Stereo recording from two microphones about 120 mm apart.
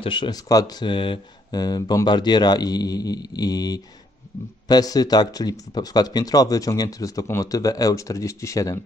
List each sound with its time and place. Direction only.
0.0 s speech: 40° left (ahead or behind); by 8.7 s 25° left (ahead or behind)